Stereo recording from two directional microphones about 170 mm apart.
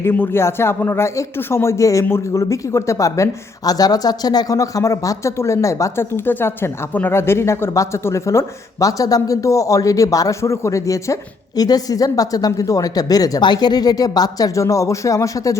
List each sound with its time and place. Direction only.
0.0 s a man's voice: 10° left (ahead or behind)